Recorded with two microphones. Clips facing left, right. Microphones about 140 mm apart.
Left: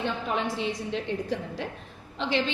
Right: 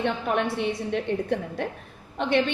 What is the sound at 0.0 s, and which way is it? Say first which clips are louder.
A woman's voice: right 4 dB; 65° right (ahead or behind).